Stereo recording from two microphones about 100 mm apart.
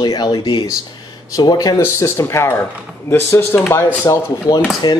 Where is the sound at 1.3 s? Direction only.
40° left (ahead or behind).